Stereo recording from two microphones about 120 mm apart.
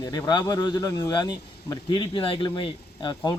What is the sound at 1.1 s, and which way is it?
A man's voice, 35° left (ahead or behind).